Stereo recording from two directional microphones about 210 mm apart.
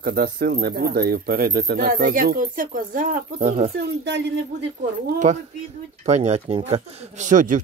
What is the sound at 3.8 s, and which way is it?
Speech, 55° right (ahead or behind).